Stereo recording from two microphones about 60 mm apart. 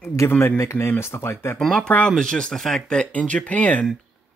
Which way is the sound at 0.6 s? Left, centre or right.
Left.